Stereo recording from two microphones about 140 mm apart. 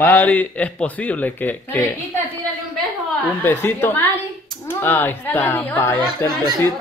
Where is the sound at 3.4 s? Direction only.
15° left (ahead or behind).